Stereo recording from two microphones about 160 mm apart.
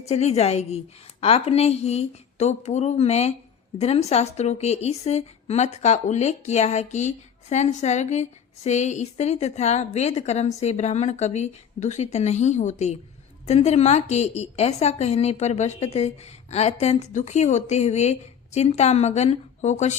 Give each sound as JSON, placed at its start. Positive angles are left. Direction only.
{"t": 0.1, "sound": "a woman's voice", "side_deg": 40}